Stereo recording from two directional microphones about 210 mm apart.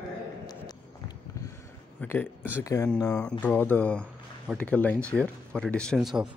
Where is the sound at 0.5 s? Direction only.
20° left (ahead or behind).